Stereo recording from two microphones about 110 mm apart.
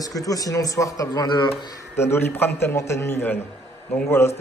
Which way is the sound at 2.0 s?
20° left (ahead or behind).